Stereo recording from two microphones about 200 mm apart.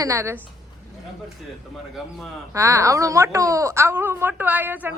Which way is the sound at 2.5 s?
15° right (ahead or behind).